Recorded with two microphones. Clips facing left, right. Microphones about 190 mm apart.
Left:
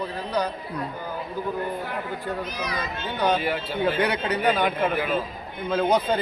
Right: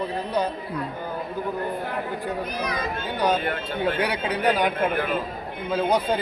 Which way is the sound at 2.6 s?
50° right (ahead or behind).